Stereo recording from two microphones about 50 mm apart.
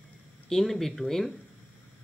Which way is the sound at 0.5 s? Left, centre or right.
Centre.